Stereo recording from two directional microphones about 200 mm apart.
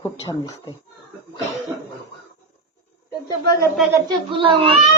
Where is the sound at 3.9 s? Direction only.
20° right (ahead or behind).